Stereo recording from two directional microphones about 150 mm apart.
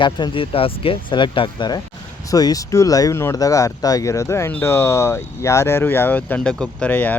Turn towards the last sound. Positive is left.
turn(degrees=10)  # may be behind; listen again after turning